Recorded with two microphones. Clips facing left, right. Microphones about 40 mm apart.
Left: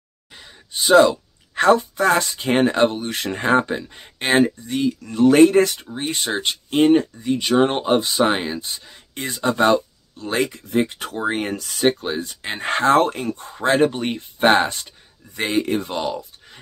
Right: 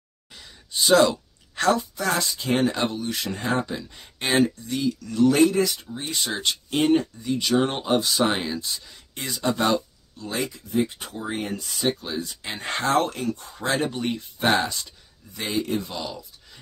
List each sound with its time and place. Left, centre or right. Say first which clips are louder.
0.3 s a sound: left 1 dB; centre
1.5 s speech: left 6 dB; left
5.9 s speech: left 4 dB; left
10.1 s speech: left 7 dB; left
11.9 s speech: left 4 dB; left